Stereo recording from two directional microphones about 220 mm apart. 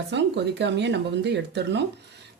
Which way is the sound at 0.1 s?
55° right (ahead or behind).